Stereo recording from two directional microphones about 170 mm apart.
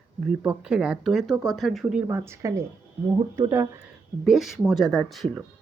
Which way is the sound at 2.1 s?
15° right (ahead or behind).